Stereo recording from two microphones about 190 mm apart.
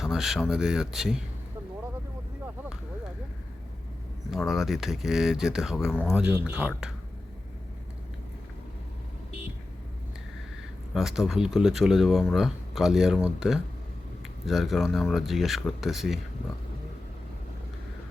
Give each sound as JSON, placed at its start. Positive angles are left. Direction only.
{"t": 0.0, "sound": "speech", "side_deg": 0}
{"t": 4.3, "sound": "speech", "side_deg": 0}
{"t": 10.9, "sound": "speech", "side_deg": 0}